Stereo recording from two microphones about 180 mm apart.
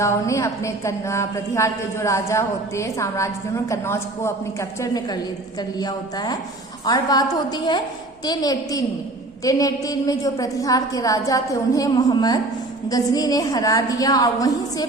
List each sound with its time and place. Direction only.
0.0 s a woman's voice: 15° left (ahead or behind)